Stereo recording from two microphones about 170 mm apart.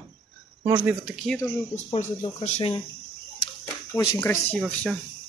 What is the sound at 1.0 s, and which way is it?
Speech, centre (ahead or behind).